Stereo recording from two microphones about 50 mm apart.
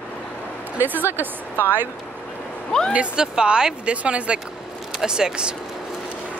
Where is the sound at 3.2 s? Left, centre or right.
Centre.